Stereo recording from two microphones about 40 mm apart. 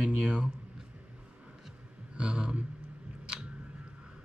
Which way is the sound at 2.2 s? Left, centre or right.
Right.